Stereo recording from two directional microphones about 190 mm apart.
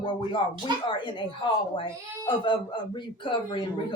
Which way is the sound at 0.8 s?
25° left (ahead or behind).